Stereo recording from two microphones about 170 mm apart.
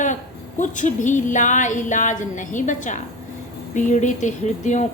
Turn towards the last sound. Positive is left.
turn(degrees=45)  # may be behind; listen again after turning